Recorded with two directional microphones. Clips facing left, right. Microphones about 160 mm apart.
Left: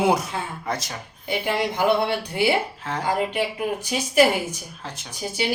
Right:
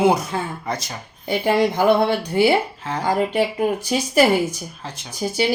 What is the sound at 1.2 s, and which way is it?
Speech, 40° right (ahead or behind).